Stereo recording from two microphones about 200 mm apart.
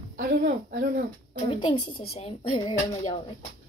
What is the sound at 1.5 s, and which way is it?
A woman's voice, 25° left (ahead or behind).